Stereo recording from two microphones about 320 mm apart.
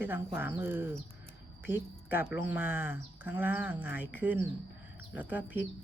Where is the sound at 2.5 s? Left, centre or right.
Centre.